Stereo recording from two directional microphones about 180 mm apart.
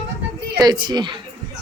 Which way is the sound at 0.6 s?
25° right (ahead or behind).